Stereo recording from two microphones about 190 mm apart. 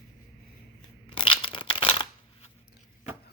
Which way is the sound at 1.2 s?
25° left (ahead or behind).